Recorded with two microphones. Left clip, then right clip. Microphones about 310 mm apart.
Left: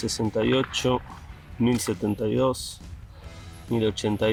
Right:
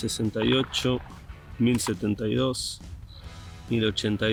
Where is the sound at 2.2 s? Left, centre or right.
Left.